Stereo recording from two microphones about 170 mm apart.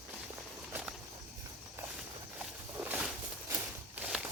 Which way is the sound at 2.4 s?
10° right (ahead or behind).